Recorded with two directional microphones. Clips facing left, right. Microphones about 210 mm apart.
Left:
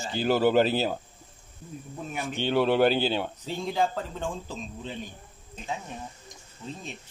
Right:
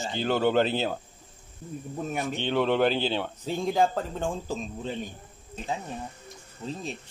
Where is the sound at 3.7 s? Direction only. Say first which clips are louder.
Right 2 dB; 45° right (ahead or behind).